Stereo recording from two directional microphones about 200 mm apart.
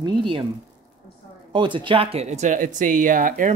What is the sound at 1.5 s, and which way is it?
Speech, 25° right (ahead or behind).